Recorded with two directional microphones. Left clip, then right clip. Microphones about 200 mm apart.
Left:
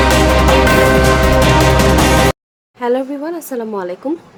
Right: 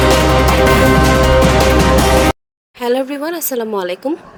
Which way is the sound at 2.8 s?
40° right (ahead or behind).